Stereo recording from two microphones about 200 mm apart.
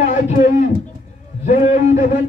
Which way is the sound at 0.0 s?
40° left (ahead or behind).